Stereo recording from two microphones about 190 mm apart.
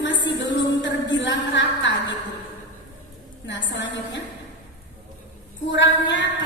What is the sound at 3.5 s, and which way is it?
Speech, 70° left (ahead or behind).